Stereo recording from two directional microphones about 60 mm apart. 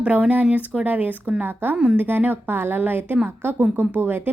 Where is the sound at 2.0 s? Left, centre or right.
Right.